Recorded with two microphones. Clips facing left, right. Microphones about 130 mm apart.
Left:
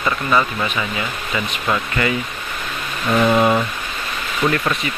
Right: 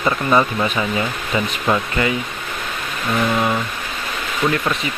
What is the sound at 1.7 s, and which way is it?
Speech, 15° right (ahead or behind).